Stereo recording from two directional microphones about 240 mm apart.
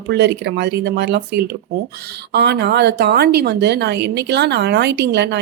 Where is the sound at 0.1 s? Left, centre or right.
Right.